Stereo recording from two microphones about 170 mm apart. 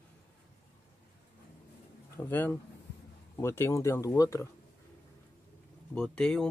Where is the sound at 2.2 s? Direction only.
10° left (ahead or behind).